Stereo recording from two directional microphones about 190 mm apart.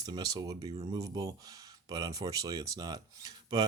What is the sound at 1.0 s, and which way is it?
Speech, 15° right (ahead or behind).